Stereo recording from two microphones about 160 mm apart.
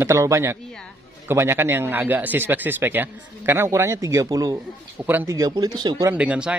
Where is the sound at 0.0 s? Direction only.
20° right (ahead or behind).